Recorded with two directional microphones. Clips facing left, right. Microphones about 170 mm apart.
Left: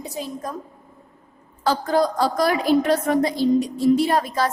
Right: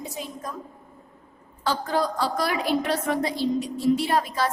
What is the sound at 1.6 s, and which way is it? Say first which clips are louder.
A woman's voice: left 5 dB; 40° left (ahead or behind).